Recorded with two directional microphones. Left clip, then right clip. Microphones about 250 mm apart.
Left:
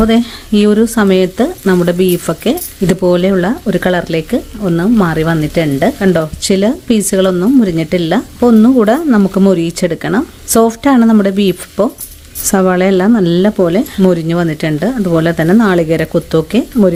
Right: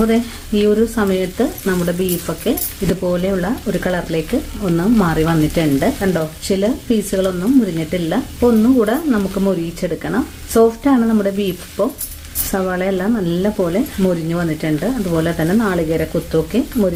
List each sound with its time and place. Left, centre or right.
0.1 s speech: left